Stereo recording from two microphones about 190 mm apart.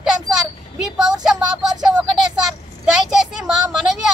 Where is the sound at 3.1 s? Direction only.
5° right (ahead or behind).